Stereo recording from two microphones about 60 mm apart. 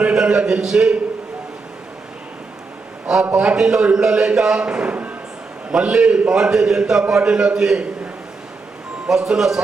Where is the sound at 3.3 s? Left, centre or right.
Centre.